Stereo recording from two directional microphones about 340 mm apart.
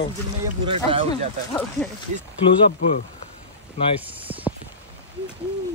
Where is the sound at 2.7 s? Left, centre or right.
Left.